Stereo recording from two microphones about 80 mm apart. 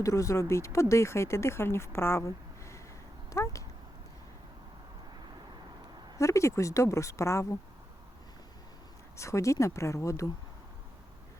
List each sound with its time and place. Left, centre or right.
0.0 s speech: left
3.3 s cat: left
6.1 s speech: left
9.1 s speech: left